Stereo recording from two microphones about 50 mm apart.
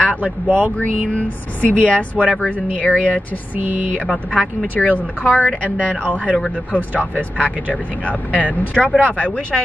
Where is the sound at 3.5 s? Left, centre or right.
Right.